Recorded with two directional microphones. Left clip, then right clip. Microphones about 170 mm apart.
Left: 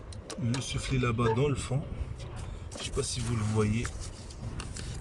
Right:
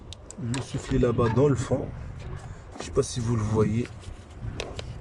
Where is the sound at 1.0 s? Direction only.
90° right.